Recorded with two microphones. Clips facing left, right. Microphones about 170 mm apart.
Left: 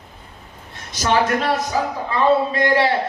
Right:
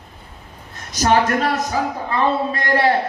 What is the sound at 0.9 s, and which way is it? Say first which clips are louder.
Speech: right 2 dB; 40° right (ahead or behind).